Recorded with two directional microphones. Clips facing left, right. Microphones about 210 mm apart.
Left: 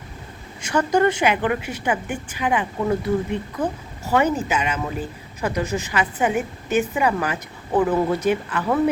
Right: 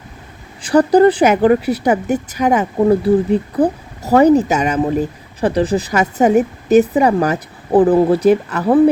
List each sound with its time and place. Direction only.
0.6 s a woman's voice: 35° right (ahead or behind)